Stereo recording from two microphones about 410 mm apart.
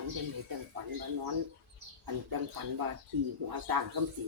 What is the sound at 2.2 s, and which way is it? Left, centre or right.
Speech, right.